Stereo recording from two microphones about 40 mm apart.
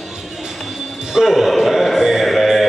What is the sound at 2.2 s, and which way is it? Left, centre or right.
Music, centre.